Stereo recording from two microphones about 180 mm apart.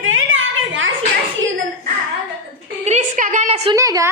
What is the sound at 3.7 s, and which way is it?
Speech, 20° right (ahead or behind).